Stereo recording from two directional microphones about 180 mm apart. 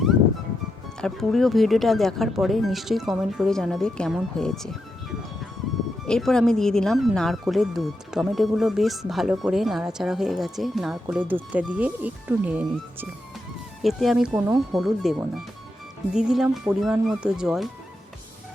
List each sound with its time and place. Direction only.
1.0 s speech: centre (ahead or behind)
6.1 s speech: 5° left (ahead or behind)